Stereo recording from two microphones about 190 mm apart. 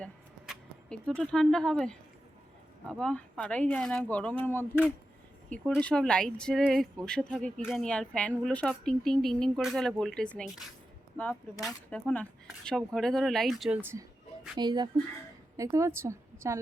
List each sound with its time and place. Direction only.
0.0 s a sound: centre (ahead or behind)
2.9 s speech: 5° left (ahead or behind)
5.5 s speech: 5° left (ahead or behind)
14.5 s a woman's voice: 20° right (ahead or behind)